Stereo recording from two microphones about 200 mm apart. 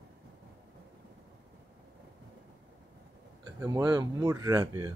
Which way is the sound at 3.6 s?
20° right (ahead or behind).